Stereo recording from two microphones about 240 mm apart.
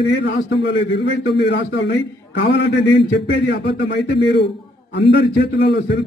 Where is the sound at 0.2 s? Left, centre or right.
Left.